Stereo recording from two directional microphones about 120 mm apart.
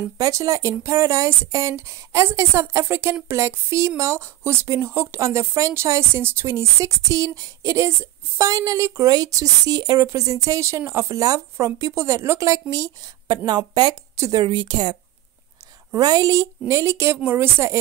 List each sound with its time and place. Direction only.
0.2 s speech: 25° right (ahead or behind)
14.1 s a woman's voice: 25° right (ahead or behind)
14.4 s speech: 40° right (ahead or behind)
15.9 s speech: 30° right (ahead or behind)